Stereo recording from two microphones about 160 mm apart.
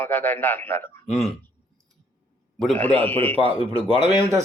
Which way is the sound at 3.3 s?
35° right (ahead or behind).